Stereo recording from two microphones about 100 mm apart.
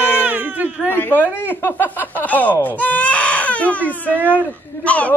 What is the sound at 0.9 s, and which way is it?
Speech, 20° left (ahead or behind).